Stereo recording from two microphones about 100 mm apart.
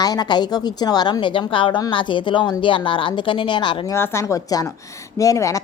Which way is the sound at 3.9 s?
30° left (ahead or behind).